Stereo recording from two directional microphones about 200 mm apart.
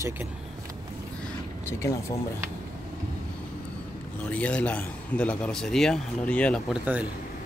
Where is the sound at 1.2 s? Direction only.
10° left (ahead or behind).